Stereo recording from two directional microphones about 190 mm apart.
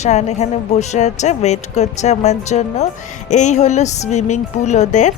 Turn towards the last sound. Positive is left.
turn(degrees=40)  # may be behind; listen again after turning